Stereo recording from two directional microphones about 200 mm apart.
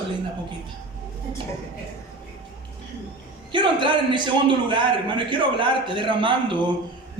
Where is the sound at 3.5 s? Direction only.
25° right (ahead or behind).